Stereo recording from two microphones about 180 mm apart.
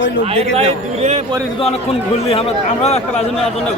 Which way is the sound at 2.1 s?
35° left (ahead or behind).